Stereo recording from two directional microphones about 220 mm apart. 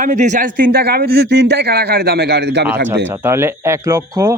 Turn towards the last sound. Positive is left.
turn(degrees=-15)  # may be behind; listen again after turning